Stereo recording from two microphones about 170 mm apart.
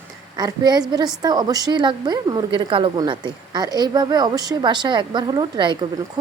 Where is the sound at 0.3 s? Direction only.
25° right (ahead or behind).